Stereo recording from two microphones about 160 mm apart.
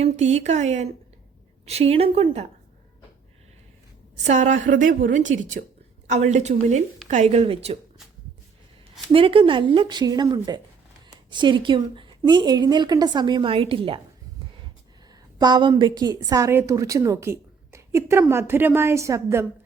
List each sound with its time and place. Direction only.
0.0 s a woman's voice: 45° right (ahead or behind)
4.2 s a woman's voice: 45° right (ahead or behind)
9.1 s a woman's voice: 35° right (ahead or behind)
15.1 s a woman's voice: 25° right (ahead or behind)